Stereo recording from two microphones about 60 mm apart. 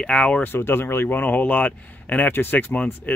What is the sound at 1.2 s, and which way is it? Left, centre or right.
Speech, left.